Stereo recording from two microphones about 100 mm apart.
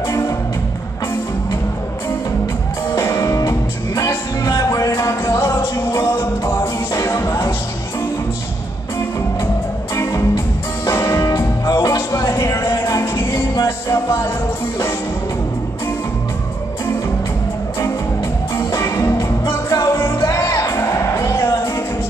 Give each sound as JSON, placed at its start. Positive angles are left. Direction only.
{"t": 3.0, "sound": "music", "side_deg": 30}
{"t": 9.9, "sound": "music", "side_deg": 30}
{"t": 18.6, "sound": "music", "side_deg": 30}